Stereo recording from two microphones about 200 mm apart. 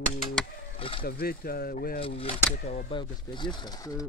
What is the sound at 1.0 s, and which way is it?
Speech, 50° left (ahead or behind).